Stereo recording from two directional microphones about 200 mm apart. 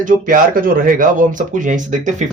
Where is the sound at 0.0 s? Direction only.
45° right (ahead or behind).